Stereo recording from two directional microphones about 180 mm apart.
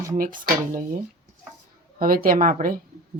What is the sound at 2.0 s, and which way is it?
Speech, 55° right (ahead or behind).